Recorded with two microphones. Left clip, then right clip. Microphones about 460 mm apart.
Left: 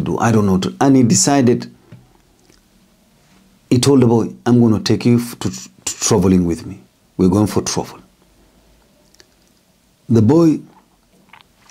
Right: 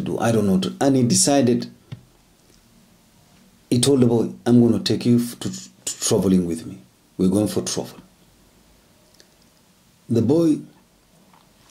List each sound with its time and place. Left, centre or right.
0.0 s speech: left
3.6 s speech: left
10.1 s speech: left